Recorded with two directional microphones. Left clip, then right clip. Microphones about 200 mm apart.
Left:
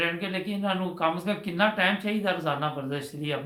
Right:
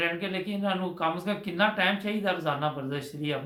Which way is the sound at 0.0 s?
5° right (ahead or behind).